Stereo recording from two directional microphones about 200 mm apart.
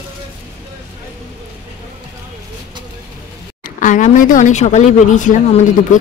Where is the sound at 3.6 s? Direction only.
40° left (ahead or behind).